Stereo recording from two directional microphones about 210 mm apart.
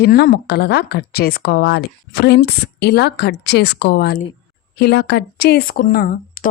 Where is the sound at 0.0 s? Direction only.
50° left (ahead or behind).